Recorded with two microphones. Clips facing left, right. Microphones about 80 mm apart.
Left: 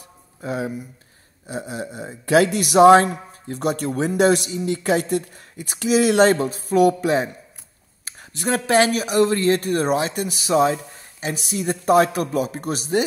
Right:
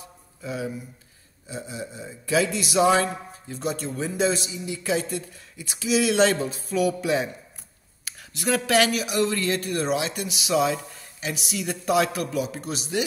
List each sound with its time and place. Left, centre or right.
0.4 s a man's voice: left